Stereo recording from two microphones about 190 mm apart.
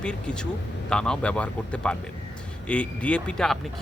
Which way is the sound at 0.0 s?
5° left (ahead or behind).